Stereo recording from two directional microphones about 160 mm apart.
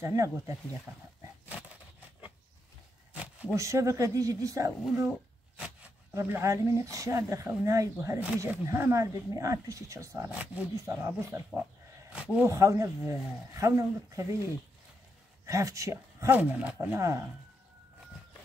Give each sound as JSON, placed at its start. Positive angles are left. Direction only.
{"t": 0.0, "sound": "speech", "side_deg": -20}
{"t": 3.5, "sound": "speech", "side_deg": -20}
{"t": 6.1, "sound": "speech", "side_deg": -15}
{"t": 12.1, "sound": "a sound", "side_deg": -10}
{"t": 12.5, "sound": "speech", "side_deg": -20}
{"t": 15.4, "sound": "speech", "side_deg": -20}